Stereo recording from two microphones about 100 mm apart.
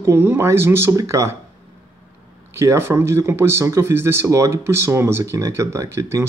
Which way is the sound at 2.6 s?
25° right (ahead or behind).